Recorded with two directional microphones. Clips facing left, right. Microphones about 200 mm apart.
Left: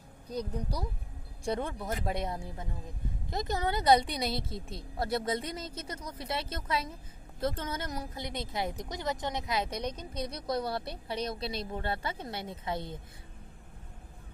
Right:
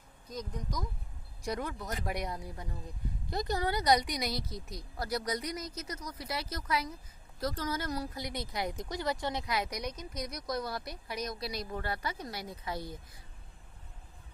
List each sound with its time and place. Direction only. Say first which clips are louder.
0.3 s a woman's voice: left 5 dB; 35° left (ahead or behind)